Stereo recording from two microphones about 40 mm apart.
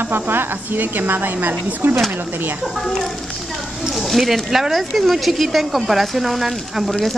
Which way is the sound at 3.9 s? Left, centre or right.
Centre.